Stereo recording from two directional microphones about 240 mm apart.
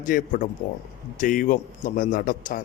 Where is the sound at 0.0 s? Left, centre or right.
Left.